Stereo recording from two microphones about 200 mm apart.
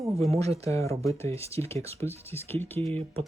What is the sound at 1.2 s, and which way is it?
Speech, 30° right (ahead or behind).